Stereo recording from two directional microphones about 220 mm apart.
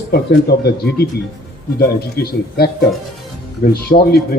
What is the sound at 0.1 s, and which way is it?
Speech, 45° left (ahead or behind).